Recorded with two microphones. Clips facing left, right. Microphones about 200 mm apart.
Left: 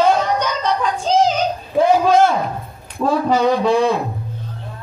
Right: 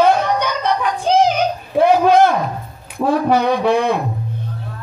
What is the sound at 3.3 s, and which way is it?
Speech, 60° right (ahead or behind).